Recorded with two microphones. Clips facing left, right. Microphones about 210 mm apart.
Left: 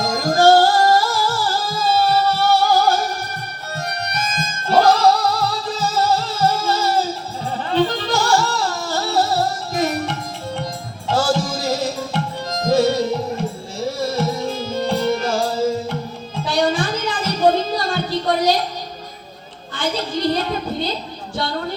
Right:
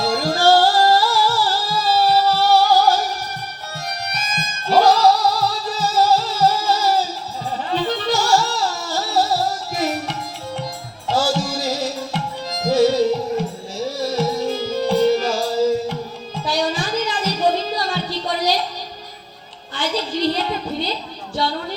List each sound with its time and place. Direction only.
0.0 s music: 45° left (ahead or behind)
14.1 s music: 55° left (ahead or behind)
19.7 s a sound: 50° left (ahead or behind)